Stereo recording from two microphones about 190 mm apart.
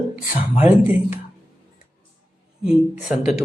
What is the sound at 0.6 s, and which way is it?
Speech, 10° right (ahead or behind).